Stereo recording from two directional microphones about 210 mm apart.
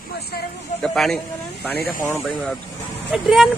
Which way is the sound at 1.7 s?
45° left (ahead or behind).